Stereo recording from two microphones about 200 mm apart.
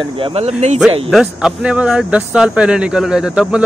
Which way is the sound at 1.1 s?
5° right (ahead or behind).